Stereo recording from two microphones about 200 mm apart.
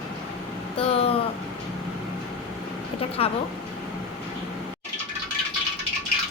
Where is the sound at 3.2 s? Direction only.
30° left (ahead or behind).